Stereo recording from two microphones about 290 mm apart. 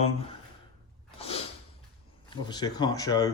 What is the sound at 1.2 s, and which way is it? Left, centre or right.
Snort, centre.